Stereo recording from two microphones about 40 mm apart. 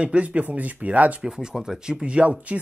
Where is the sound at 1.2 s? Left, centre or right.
Centre; by 2.5 s right.